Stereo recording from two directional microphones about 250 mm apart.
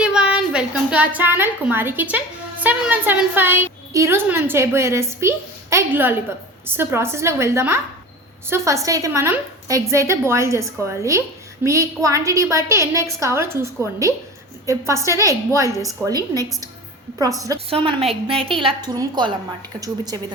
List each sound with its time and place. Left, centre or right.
0.0 s a woman's voice: centre